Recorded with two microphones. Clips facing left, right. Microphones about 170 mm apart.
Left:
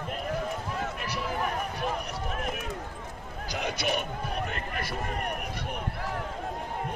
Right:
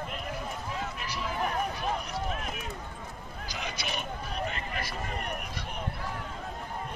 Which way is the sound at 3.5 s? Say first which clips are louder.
Left 7 dB; 60° left (ahead or behind).